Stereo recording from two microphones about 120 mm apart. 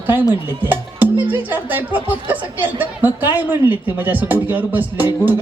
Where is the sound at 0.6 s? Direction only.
15° right (ahead or behind).